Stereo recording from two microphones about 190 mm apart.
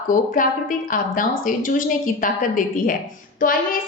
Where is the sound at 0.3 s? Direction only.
45° left (ahead or behind).